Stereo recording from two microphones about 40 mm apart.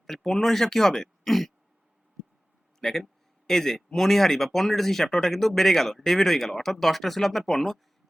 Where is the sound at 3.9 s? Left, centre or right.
Centre.